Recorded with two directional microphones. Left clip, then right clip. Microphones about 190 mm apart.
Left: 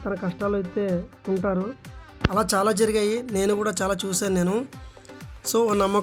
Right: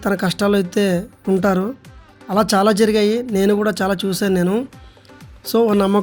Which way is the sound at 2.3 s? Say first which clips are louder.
Right 7 dB; 10° right (ahead or behind).